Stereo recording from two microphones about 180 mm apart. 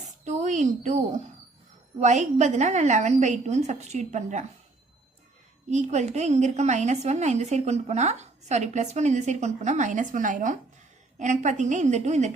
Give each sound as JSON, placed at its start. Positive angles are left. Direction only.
{"t": 0.3, "sound": "a sound", "side_deg": -40}
{"t": 2.0, "sound": "a woman's voice", "side_deg": -40}
{"t": 5.7, "sound": "a woman's voice", "side_deg": -40}